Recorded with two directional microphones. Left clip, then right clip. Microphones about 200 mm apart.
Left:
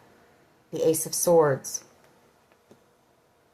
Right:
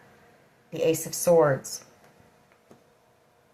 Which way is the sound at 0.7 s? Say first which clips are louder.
Left 1 dB; 45° left (ahead or behind).